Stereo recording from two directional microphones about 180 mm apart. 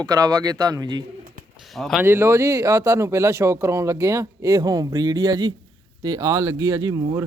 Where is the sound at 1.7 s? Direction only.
Centre (ahead or behind).